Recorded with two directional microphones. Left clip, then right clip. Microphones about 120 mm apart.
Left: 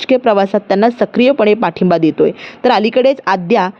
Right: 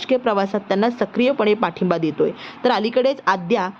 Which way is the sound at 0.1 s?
40° left (ahead or behind).